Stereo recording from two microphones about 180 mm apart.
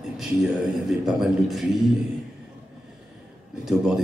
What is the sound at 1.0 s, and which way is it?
Speech, centre (ahead or behind).